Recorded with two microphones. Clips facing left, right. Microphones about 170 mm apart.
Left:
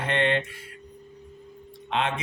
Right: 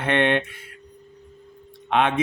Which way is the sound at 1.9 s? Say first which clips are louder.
Right 7 dB; 60° right (ahead or behind).